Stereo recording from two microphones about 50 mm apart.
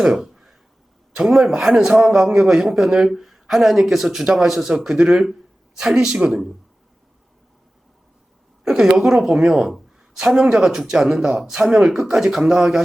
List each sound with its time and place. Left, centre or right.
0.0 s a sound: centre
1.3 s speech: centre
8.8 s speech: centre